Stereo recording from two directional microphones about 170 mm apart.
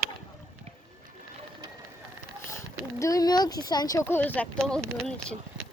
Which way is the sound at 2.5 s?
15° left (ahead or behind).